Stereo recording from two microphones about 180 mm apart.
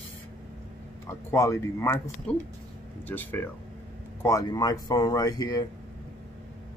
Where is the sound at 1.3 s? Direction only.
15° left (ahead or behind).